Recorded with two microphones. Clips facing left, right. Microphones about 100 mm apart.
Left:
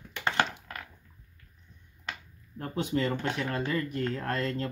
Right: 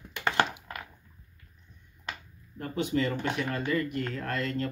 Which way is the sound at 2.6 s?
35° left (ahead or behind).